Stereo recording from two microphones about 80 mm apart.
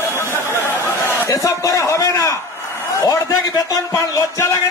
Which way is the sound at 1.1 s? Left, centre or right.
Left.